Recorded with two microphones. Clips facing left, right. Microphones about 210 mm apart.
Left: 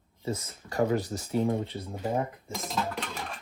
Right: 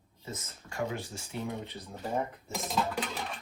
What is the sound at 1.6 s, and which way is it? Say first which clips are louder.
Speech: left 7 dB; 30° left (ahead or behind).